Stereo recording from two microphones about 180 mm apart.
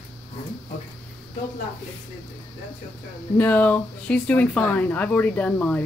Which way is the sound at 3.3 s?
10° left (ahead or behind).